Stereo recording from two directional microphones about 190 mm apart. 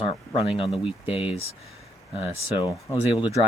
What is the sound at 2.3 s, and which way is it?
Speech, 25° left (ahead or behind).